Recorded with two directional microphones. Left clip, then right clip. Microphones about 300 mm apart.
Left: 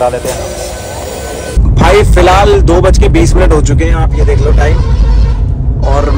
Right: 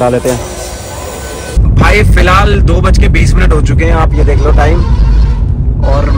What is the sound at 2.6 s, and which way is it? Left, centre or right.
Speech, centre.